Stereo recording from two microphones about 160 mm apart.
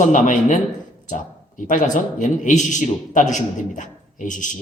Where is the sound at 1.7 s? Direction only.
50° left (ahead or behind).